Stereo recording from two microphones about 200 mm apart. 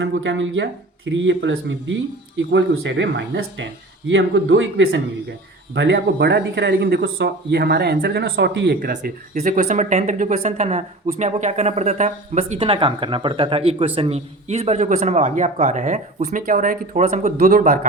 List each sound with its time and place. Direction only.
0.0 s speech: 70° right (ahead or behind)
8.8 s speech: 40° right (ahead or behind)